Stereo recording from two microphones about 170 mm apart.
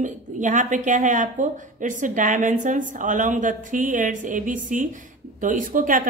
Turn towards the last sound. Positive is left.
turn(degrees=-50)  # may be behind; listen again after turning